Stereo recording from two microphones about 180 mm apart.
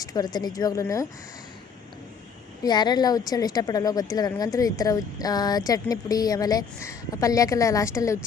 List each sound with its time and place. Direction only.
0.0 s a woman's voice: 20° left (ahead or behind)
2.6 s a woman's voice: 25° left (ahead or behind)